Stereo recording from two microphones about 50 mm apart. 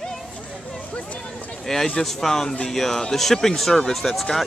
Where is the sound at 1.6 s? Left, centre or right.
Centre.